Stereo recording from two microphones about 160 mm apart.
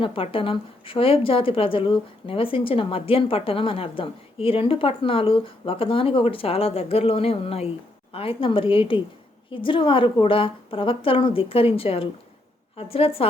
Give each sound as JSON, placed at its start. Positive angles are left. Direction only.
{"t": 0.0, "sound": "a woman's voice", "side_deg": 35}